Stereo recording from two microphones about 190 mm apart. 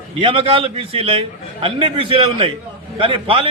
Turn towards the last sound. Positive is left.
turn(degrees=-25)  # may be behind; listen again after turning